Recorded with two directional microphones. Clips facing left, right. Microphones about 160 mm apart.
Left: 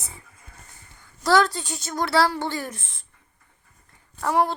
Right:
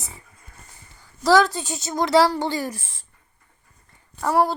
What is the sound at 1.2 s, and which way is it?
A woman's voice, 15° right (ahead or behind).